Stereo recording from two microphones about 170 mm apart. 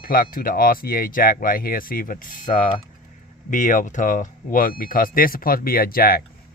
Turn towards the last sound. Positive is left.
turn(degrees=60)  # may be behind; listen again after turning